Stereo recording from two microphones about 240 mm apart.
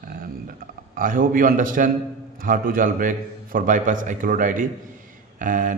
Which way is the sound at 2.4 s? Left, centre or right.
Right.